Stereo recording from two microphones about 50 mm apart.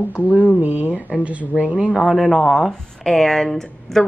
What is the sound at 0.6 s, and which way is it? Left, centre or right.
Speech, right.